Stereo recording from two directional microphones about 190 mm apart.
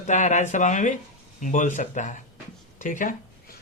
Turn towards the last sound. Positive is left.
turn(degrees=45)  # may be behind; listen again after turning